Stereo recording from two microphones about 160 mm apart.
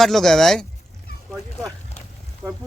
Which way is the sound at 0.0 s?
Centre (ahead or behind).